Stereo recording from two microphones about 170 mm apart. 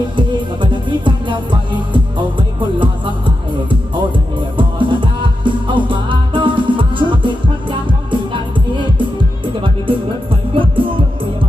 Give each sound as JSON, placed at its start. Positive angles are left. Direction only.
{"t": 0.2, "sound": "music", "side_deg": -30}